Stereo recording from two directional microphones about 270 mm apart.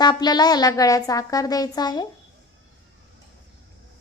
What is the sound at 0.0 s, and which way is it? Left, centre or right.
A woman's voice, centre.